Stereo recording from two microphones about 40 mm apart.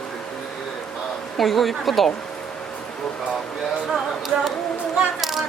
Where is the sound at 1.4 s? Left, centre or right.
Centre.